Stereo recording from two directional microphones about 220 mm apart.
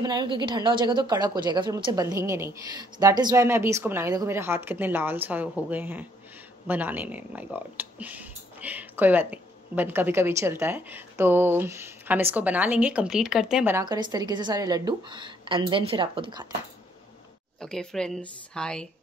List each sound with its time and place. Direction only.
0.0 s speech: 20° right (ahead or behind)
17.6 s speech: 5° left (ahead or behind)